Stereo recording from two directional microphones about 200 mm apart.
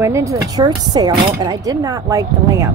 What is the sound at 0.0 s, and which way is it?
Speech, 15° right (ahead or behind).